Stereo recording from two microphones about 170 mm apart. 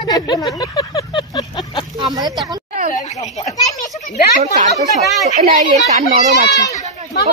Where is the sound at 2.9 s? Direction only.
40° left (ahead or behind).